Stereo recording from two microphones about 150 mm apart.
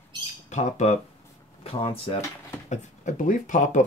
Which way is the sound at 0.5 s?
50° left (ahead or behind).